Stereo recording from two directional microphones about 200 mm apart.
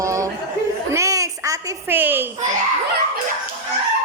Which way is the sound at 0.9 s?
15° right (ahead or behind).